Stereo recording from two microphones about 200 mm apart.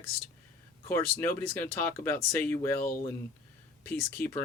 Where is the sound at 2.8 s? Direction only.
45° left (ahead or behind).